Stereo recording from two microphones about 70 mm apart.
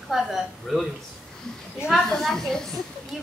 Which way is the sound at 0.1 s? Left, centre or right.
Centre.